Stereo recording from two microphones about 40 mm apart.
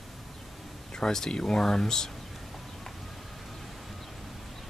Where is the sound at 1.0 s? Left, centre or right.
Centre.